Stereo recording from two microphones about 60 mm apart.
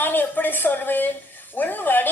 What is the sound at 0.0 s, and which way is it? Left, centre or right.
A woman's voice, left.